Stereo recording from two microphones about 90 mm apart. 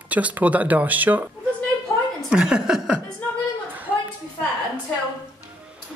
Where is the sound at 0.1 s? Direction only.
15° right (ahead or behind).